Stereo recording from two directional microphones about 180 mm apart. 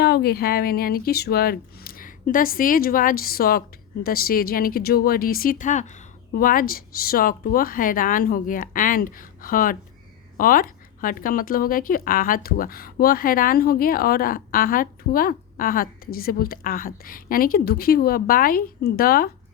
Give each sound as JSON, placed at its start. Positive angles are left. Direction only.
{"t": 0.0, "sound": "speech", "side_deg": 60}